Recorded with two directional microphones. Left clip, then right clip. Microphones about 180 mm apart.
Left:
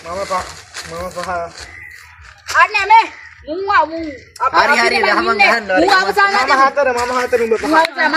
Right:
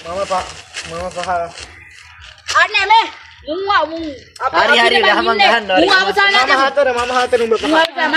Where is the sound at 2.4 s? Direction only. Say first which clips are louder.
Left 1 dB; 5° left (ahead or behind).